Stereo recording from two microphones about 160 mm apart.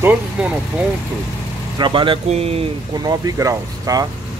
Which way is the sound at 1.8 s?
30° right (ahead or behind).